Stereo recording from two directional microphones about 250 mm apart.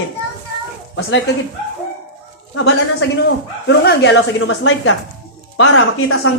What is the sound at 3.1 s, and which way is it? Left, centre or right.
Speech, left.